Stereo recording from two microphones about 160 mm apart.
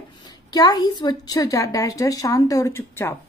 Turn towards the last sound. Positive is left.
turn(degrees=15)  # may be behind; listen again after turning